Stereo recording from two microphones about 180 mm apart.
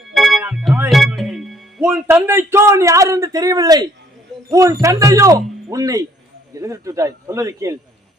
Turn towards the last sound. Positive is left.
turn(degrees=-15)  # may be behind; listen again after turning